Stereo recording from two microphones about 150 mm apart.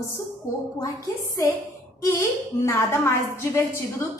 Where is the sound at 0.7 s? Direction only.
25° left (ahead or behind).